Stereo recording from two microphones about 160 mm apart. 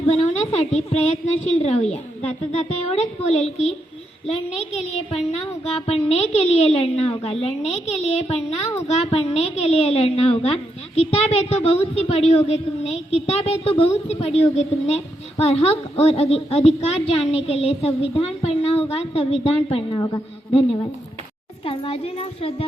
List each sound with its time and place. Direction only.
0.0 s a woman's voice: 40° left (ahead or behind)
21.6 s a woman's voice: 35° left (ahead or behind)